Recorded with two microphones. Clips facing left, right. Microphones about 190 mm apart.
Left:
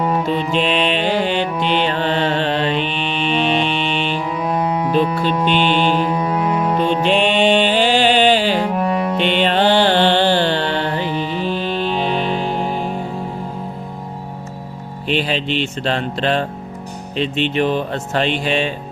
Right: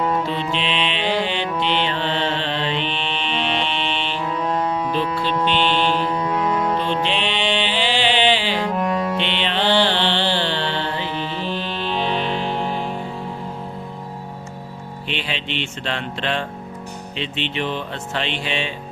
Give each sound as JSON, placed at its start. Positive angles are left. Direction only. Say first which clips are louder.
{"t": 0.0, "sound": "music", "louder": "left 3 dB", "side_deg": 15}
{"t": 0.5, "sound": "mantra", "louder": "left 6 dB", "side_deg": 45}
{"t": 1.6, "sound": "music", "louder": "left 4 dB", "side_deg": 45}
{"t": 2.8, "sound": "music", "louder": "left 4 dB", "side_deg": 10}
{"t": 7.0, "sound": "music", "louder": "left 8 dB", "side_deg": 45}
{"t": 8.6, "sound": "music", "louder": "left 3 dB", "side_deg": 10}
{"t": 9.1, "sound": "music", "louder": "left 7 dB", "side_deg": 45}
{"t": 11.0, "sound": "music", "louder": "left 5 dB", "side_deg": 10}
{"t": 15.0, "sound": "speech", "louder": "left 9 dB", "side_deg": 40}